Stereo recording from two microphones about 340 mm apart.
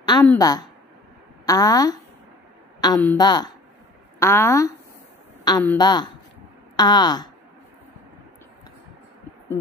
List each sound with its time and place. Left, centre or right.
0.0 s a woman's voice: centre